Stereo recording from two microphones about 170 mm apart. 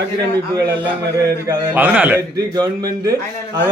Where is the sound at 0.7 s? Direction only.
30° right (ahead or behind).